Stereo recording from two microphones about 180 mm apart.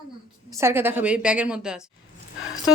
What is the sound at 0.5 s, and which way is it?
A woman's voice, 15° right (ahead or behind).